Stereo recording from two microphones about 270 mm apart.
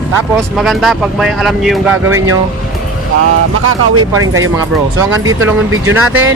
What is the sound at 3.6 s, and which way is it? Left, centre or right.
Speech, right.